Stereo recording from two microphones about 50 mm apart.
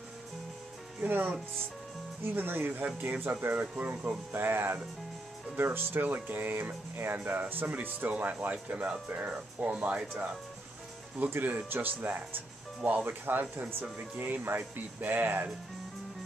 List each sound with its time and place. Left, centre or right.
1.0 s speech: right
4.3 s speech: right
11.2 s speech: right